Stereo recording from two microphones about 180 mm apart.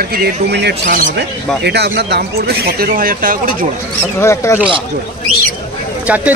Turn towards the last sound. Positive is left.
turn(degrees=-10)  # may be behind; listen again after turning